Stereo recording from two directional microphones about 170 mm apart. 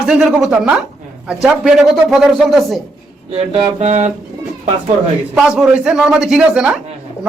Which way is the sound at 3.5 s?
40° right (ahead or behind).